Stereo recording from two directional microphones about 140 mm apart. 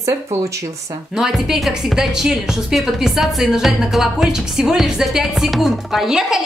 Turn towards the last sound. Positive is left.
turn(degrees=-5)  # may be behind; listen again after turning